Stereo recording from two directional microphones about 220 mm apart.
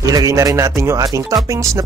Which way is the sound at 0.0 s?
15° right (ahead or behind).